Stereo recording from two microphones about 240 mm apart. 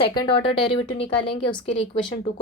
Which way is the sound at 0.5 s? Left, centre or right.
Left.